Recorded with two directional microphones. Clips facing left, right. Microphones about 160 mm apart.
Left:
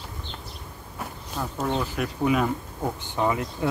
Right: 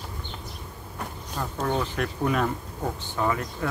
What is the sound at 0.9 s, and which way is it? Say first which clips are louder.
Insect: left 1 dB; 5° left (ahead or behind).